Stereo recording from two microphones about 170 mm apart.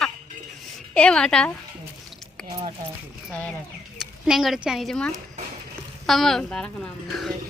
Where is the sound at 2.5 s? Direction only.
25° right (ahead or behind).